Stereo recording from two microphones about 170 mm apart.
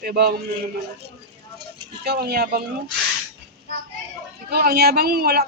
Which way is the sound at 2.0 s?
65° right (ahead or behind).